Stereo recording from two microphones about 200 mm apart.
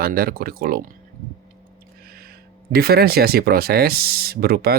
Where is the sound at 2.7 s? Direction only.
50° right (ahead or behind).